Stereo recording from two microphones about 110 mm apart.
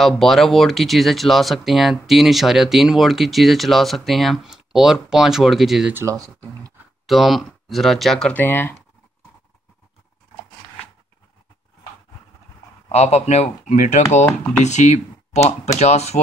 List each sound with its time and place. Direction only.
0.0 s speech: centre (ahead or behind)
5.9 s speech: 30° right (ahead or behind)
7.1 s speech: centre (ahead or behind)
8.3 s speech: 15° left (ahead or behind)
12.8 s speech: 75° left (ahead or behind)